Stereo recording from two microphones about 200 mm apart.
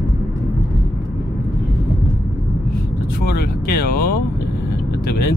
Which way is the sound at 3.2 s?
50° left (ahead or behind).